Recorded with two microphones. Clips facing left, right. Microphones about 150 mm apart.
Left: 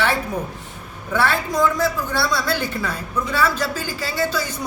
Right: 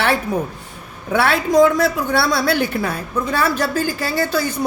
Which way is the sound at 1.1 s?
75° right (ahead or behind).